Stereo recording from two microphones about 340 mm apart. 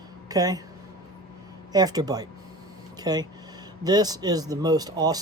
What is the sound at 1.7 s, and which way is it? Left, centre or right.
Speech, centre.